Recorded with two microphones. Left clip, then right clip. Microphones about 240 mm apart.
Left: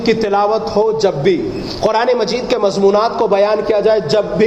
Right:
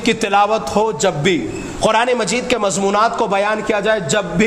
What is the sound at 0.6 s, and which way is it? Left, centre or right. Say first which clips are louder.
Speech: left 3 dB; right.